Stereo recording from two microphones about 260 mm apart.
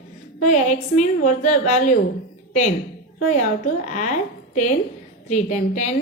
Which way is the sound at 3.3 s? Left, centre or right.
Left.